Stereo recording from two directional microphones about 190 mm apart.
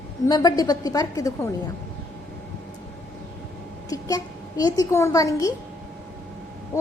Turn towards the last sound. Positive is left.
turn(degrees=15)  # may be behind; listen again after turning